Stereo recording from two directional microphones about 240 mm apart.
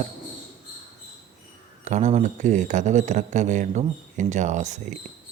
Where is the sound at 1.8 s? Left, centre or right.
Right.